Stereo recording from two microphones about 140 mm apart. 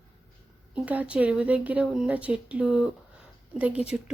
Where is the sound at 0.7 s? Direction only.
10° right (ahead or behind).